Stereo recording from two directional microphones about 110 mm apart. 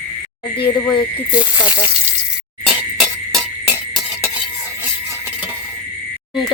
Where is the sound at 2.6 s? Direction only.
Centre (ahead or behind).